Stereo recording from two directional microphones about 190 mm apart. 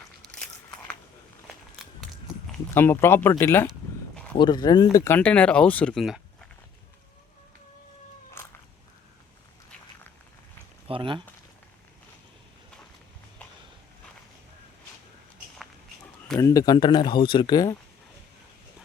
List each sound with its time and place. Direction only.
0.2 s a sound: centre (ahead or behind)
2.7 s speech: 10° left (ahead or behind)
4.4 s speech: 20° left (ahead or behind); by 6.5 s centre (ahead or behind)
10.8 s speech: 25° right (ahead or behind)
16.4 s speech: 20° left (ahead or behind)